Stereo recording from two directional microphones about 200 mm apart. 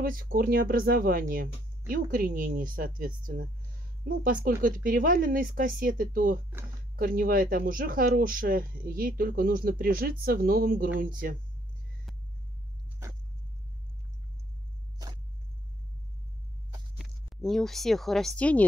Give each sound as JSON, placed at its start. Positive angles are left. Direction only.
{"t": 0.0, "sound": "speech", "side_deg": -45}
{"t": 17.0, "sound": "speech", "side_deg": 0}